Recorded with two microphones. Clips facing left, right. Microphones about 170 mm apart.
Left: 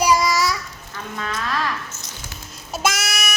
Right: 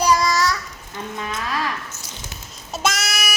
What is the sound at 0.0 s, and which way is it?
Child singing, 10° left (ahead or behind).